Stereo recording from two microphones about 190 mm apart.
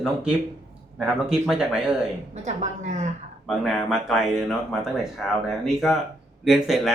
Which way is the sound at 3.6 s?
Centre (ahead or behind).